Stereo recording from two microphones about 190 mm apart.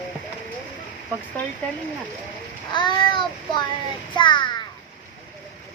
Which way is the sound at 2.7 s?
25° left (ahead or behind).